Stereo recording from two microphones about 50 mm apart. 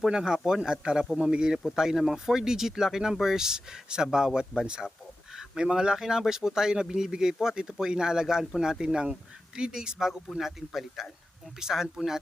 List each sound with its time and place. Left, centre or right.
0.0 s speech: centre
10.7 s speech: centre